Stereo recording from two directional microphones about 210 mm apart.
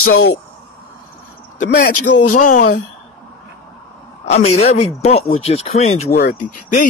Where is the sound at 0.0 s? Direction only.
85° left.